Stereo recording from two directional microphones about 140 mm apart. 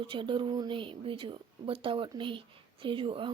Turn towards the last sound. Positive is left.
turn(degrees=-40)  # may be behind; listen again after turning